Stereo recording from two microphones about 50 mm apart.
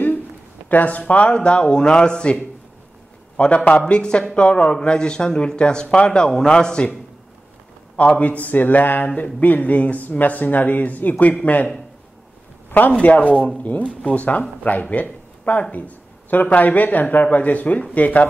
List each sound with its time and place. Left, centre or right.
0.7 s a man's voice: left
3.3 s a man's voice: left
7.9 s a man's voice: left
13.0 s a man's voice: left